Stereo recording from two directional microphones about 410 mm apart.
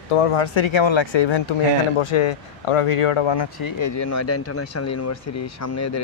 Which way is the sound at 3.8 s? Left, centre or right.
Left.